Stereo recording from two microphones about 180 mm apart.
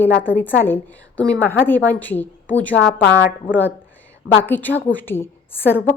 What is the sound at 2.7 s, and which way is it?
Speech, 70° left (ahead or behind).